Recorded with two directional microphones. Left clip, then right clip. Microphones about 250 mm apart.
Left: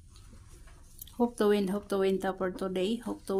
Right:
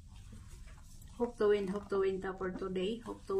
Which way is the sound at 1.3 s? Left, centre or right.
Left.